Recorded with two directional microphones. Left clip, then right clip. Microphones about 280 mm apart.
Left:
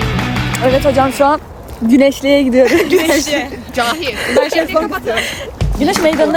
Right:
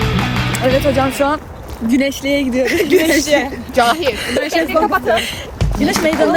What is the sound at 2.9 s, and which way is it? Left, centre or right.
Speech, centre.